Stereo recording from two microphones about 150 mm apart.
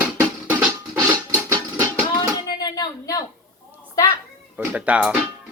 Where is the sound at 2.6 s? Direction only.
25° left (ahead or behind).